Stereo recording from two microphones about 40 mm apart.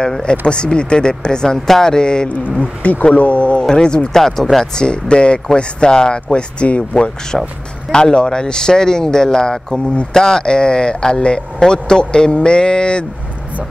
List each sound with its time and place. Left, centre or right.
0.5 s speech: left
2.8 s speech: left
3.6 s speech: centre
4.2 s speech: centre
4.7 s speech: left
6.2 s speech: left